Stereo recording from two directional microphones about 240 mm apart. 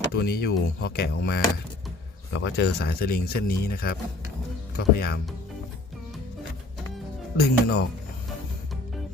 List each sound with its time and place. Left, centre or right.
0.2 s speech: left
7.3 s speech: left